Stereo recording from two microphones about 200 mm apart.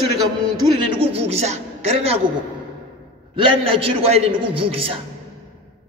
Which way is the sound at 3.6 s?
30° right (ahead or behind).